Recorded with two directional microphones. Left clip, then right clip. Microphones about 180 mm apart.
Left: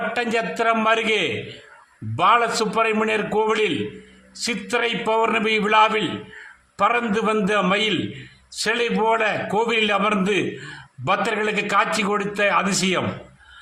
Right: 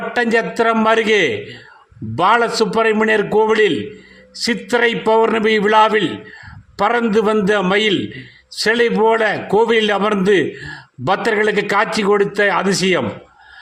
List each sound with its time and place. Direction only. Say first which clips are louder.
0.1 s a man's voice: right 6 dB; 30° right (ahead or behind)